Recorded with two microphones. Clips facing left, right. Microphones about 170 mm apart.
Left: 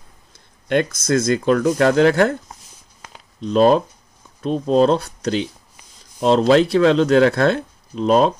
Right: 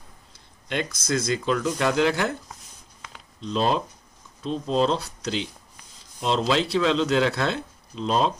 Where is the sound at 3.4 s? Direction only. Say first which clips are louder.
Left 10 dB; 55° left (ahead or behind).